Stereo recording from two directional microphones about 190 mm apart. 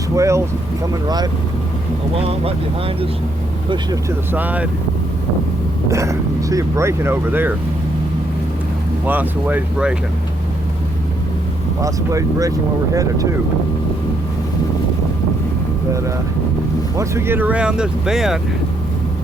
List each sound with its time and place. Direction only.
0.2 s vehicle: 15° right (ahead or behind)
1.0 s speech: 20° right (ahead or behind)
4.3 s speech: 10° right (ahead or behind)
5.9 s speech: 15° right (ahead or behind)
9.0 s speech: 10° right (ahead or behind)
11.8 s speech: 15° right (ahead or behind)
17.0 s speech: 15° right (ahead or behind)